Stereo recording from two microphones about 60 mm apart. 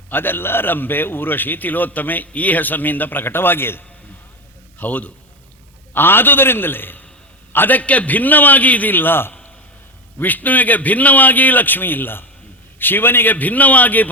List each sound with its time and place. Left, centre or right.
0.1 s a man's voice: left
4.8 s a man's voice: left